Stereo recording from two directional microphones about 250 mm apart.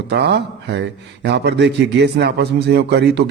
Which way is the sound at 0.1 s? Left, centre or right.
Right.